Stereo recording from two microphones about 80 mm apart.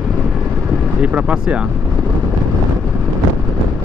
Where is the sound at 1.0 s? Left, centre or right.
Centre.